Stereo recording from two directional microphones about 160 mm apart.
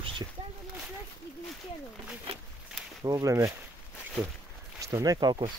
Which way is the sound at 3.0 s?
20° right (ahead or behind).